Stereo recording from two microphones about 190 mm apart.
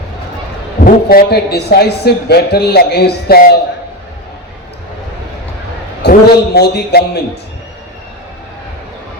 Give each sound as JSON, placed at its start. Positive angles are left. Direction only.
{"t": 1.0, "sound": "speech", "side_deg": 55}
{"t": 6.0, "sound": "a man's voice", "side_deg": 60}